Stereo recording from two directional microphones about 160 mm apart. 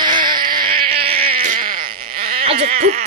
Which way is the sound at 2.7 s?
50° right (ahead or behind).